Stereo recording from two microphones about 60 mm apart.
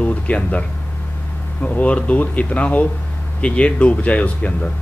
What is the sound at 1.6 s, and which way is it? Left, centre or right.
Speech, left.